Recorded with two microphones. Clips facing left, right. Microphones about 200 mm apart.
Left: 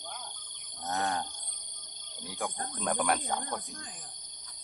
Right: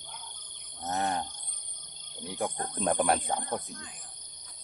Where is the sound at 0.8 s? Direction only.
20° right (ahead or behind).